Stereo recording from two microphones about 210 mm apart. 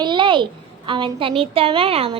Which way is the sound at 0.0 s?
20° right (ahead or behind).